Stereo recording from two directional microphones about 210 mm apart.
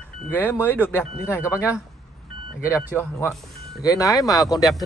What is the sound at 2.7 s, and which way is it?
Speech, 10° left (ahead or behind).